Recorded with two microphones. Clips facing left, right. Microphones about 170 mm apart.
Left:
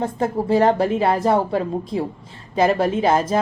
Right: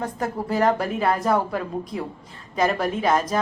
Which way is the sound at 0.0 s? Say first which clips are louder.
Left 5 dB; 25° left (ahead or behind).